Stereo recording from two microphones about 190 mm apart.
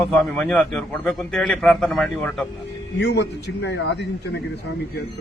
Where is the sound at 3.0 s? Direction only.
60° left (ahead or behind).